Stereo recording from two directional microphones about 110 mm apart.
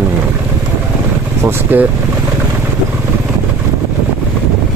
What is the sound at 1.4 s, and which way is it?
Speech, 15° right (ahead or behind).